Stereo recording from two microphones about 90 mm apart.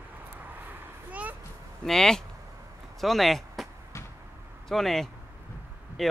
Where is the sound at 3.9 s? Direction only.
30° left (ahead or behind).